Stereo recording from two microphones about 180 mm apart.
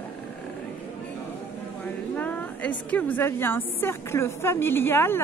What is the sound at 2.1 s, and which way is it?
A woman's voice, 10° left (ahead or behind).